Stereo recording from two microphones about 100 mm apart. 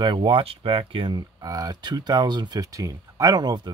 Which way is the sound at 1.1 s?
40° right (ahead or behind).